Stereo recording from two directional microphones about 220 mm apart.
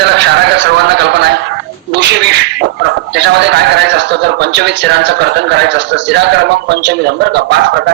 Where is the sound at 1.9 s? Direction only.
55° right (ahead or behind).